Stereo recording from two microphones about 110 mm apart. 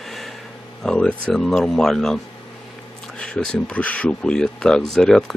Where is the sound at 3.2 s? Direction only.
5° left (ahead or behind).